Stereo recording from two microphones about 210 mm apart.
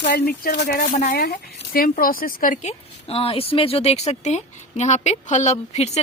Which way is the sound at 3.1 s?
25° left (ahead or behind).